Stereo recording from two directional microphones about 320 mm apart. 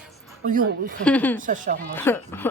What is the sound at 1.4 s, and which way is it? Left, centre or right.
Music, right.